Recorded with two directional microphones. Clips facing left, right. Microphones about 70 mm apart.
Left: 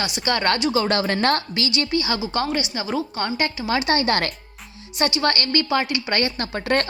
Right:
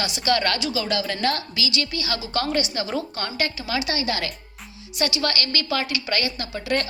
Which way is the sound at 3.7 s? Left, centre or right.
Left.